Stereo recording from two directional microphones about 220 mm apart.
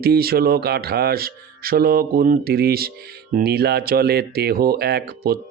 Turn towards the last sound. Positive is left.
turn(degrees=-45)  # may be behind; listen again after turning